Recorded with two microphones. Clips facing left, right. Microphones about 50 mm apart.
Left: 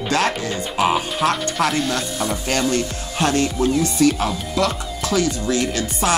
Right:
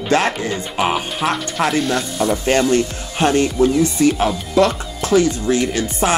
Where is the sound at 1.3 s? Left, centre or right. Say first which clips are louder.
Right 2 dB; right.